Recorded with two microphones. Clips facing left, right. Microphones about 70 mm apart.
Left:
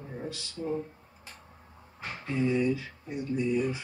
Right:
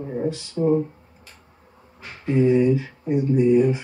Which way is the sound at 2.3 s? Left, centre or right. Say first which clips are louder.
Right 10 dB; right.